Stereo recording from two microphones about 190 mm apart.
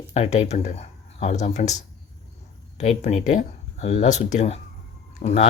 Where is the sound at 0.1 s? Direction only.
35° left (ahead or behind).